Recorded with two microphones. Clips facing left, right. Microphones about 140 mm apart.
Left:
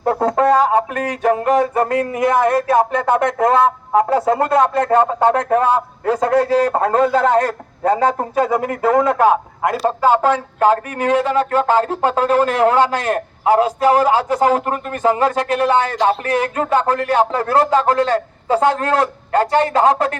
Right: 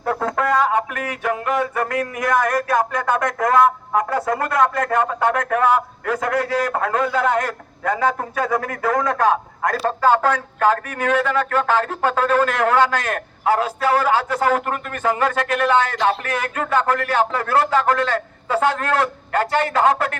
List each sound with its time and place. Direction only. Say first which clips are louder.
0.0 s music: left 6 dB; 30° left (ahead or behind)
9.7 s a man's voice: left 2 dB; 20° left (ahead or behind)
12.9 s music: left 4 dB; 30° left (ahead or behind)